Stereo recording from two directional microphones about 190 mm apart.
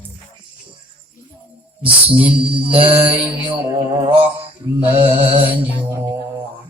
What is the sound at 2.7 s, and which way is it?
Mantra, 30° right (ahead or behind).